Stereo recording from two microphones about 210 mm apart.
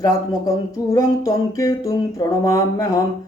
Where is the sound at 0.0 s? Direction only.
15° left (ahead or behind).